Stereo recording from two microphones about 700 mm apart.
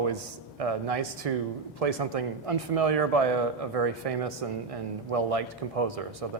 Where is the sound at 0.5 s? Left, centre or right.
Right.